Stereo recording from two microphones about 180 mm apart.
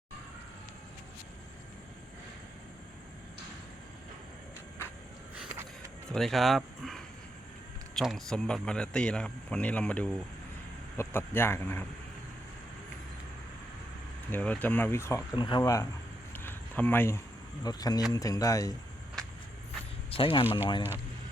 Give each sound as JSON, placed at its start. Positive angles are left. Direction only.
{"t": 5.3, "sound": "vehicle", "side_deg": -5}
{"t": 6.1, "sound": "speech", "side_deg": 0}
{"t": 14.3, "sound": "speech", "side_deg": 10}
{"t": 16.3, "sound": "a sound", "side_deg": 10}
{"t": 17.6, "sound": "speech", "side_deg": 20}
{"t": 20.1, "sound": "a sound", "side_deg": 30}
{"t": 20.4, "sound": "speech", "side_deg": -10}